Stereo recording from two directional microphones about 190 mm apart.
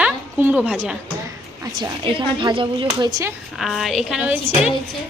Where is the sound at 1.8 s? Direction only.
25° right (ahead or behind).